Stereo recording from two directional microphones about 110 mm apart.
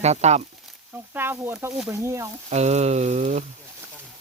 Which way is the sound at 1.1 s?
20° right (ahead or behind).